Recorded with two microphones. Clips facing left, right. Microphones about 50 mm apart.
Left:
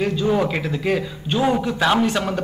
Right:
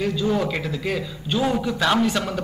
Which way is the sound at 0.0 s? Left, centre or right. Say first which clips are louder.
Left 3 dB; centre.